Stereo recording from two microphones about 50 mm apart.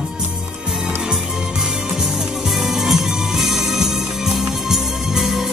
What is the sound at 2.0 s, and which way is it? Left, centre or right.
Music, centre.